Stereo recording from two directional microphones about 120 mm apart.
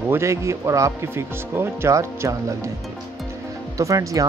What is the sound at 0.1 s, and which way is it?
Speech, 25° right (ahead or behind).